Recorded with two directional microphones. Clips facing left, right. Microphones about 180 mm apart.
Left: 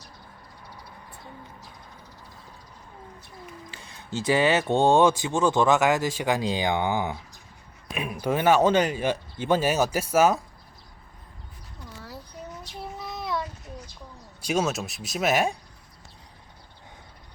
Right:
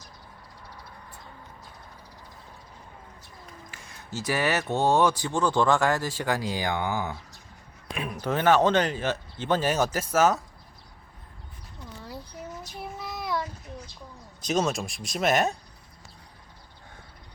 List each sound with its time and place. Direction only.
4.1 s speech: 25° left (ahead or behind); by 10.4 s 10° left (ahead or behind)
13.0 s child singing: centre (ahead or behind)
14.4 s speech: 5° left (ahead or behind)